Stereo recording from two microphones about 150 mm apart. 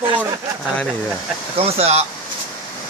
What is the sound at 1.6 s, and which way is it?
Speech, 40° right (ahead or behind).